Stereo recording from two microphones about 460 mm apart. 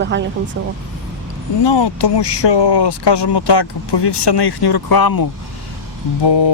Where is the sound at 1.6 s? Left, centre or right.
Left.